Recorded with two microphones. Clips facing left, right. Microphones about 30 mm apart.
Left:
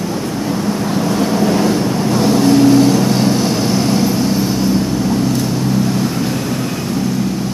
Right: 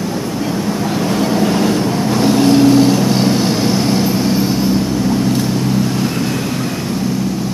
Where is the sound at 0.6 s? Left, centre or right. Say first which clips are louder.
Left 1 dB; centre.